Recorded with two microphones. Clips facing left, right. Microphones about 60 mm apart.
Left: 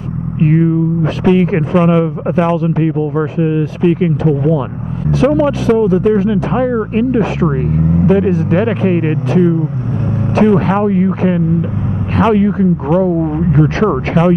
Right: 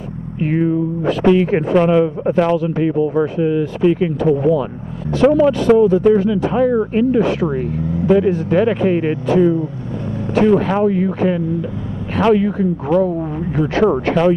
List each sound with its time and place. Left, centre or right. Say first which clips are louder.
0.4 s speech: left 4 dB; centre
4.2 s speech: left 1 dB; centre; by 7.2 s left
7.2 s speech: left 1 dB; centre
7.4 s speech: left 4 dB; centre
7.8 s vehicle: left 7 dB; left
8.3 s speech: left 3 dB; centre
8.5 s speech: left 1 dB; left
10.4 s speech: left 2 dB; centre
10.7 s speech: left 3 dB; centre